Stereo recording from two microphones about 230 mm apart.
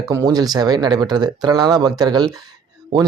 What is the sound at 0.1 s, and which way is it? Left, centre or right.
Speech, centre.